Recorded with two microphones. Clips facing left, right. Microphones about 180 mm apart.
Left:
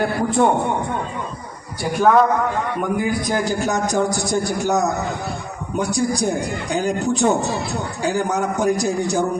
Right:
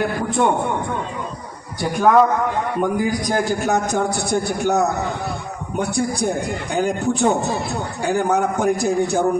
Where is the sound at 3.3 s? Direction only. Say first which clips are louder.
Right 1 dB; 50° right (ahead or behind).